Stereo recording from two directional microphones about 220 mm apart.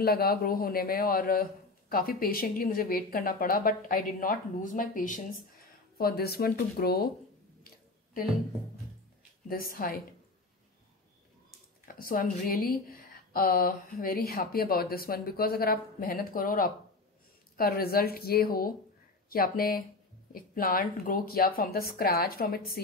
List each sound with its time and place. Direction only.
0.0 s a man's voice: 45° left (ahead or behind)
7.6 s a sound: 40° left (ahead or behind)
9.5 s a man's voice: 40° left (ahead or behind)
11.9 s a man's voice: 40° left (ahead or behind)